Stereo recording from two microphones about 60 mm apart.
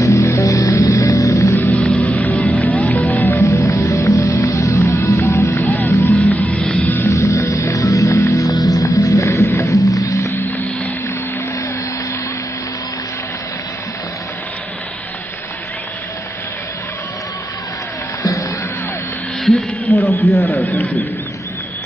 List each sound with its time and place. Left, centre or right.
0.3 s music: left
1.6 s music: left
3.3 s music: left
5.6 s vehicle: left
6.3 s music: left
7.1 s music: left
8.6 s music: left
9.9 s music: left
19.5 s a sound: centre
19.9 s a sound: left